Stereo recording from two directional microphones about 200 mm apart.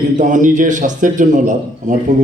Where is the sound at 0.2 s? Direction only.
40° right (ahead or behind).